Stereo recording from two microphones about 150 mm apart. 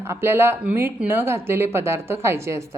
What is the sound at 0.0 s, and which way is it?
Speech, 15° right (ahead or behind).